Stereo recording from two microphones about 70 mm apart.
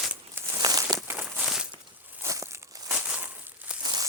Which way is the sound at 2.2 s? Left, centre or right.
Right.